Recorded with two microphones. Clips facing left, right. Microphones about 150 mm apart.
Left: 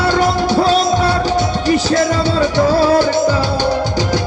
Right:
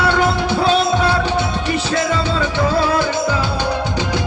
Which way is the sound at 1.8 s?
35° left (ahead or behind).